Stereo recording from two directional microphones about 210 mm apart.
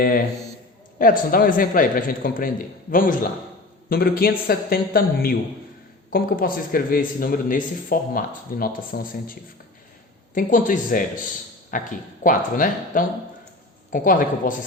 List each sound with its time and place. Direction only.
0.0 s a man's voice: 45° left (ahead or behind)
3.8 s a man's voice: 45° left (ahead or behind)